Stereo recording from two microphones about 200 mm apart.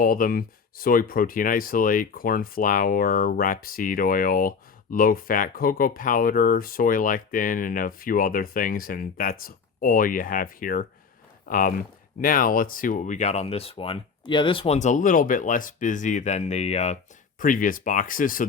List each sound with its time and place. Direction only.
0.0 s speech: 45° left (ahead or behind)